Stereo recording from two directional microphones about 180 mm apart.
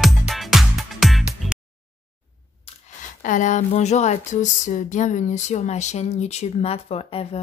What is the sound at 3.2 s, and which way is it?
Speech, 45° left (ahead or behind).